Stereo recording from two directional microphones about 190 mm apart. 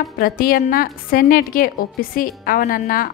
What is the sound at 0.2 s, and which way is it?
A woman's voice, 50° left (ahead or behind).